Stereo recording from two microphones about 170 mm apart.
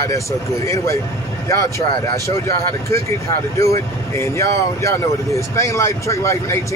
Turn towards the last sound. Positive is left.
turn(degrees=15)  # may be behind; listen again after turning